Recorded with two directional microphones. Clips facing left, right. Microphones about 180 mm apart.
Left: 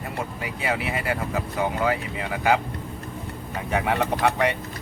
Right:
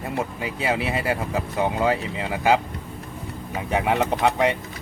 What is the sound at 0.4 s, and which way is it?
Speech, 25° right (ahead or behind).